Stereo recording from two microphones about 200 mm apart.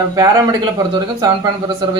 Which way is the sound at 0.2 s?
15° right (ahead or behind).